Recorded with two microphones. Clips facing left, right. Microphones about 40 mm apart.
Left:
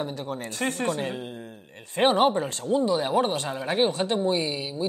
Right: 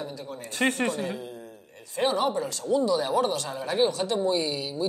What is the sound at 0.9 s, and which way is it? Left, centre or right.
A man's voice, left.